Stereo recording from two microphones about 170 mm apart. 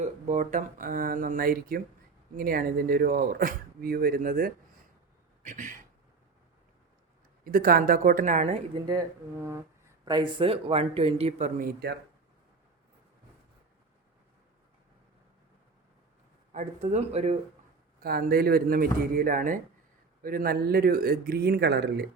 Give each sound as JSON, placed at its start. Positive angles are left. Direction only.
{"t": 0.0, "sound": "speech", "side_deg": -45}
{"t": 5.4, "sound": "speech", "side_deg": -50}
{"t": 7.4, "sound": "speech", "side_deg": -60}
{"t": 8.9, "sound": "speech", "side_deg": -20}
{"t": 16.5, "sound": "speech", "side_deg": -45}
{"t": 18.0, "sound": "speech", "side_deg": -60}